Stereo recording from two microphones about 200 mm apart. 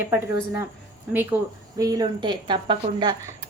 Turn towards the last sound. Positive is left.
turn(degrees=-25)  # may be behind; listen again after turning